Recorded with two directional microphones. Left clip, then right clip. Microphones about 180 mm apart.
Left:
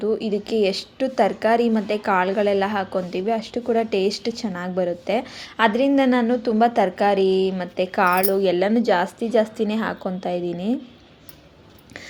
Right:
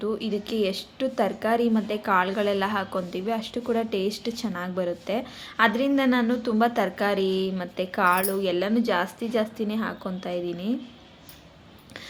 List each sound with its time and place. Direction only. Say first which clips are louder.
0.0 s a woman's voice: left 6 dB; 20° left (ahead or behind)